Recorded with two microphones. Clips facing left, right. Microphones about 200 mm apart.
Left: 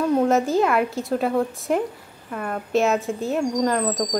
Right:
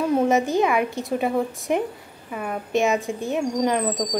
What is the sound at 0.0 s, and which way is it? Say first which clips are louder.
A woman's voice: left 1 dB; centre (ahead or behind).